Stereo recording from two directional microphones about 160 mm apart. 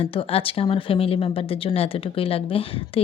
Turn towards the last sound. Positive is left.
turn(degrees=35)  # may be behind; listen again after turning